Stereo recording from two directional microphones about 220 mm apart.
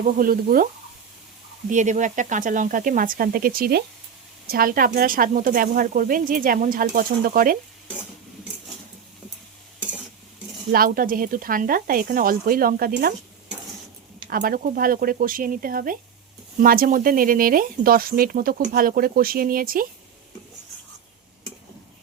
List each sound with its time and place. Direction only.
0.2 s speech: 40° right (ahead or behind)
1.7 s speech: 35° right (ahead or behind)
10.7 s speech: 40° right (ahead or behind)
14.3 s speech: 40° right (ahead or behind)